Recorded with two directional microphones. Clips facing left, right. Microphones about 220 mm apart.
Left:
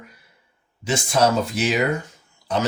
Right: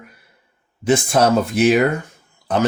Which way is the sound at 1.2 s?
55° right (ahead or behind).